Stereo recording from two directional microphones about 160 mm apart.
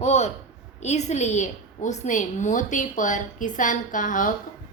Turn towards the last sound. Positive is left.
turn(degrees=55)  # may be behind; listen again after turning